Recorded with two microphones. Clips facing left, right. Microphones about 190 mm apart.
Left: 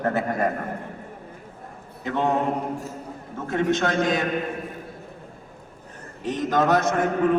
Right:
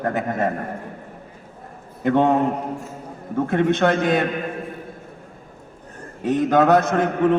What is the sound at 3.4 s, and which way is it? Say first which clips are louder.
Speech: right 4 dB; 60° right (ahead or behind).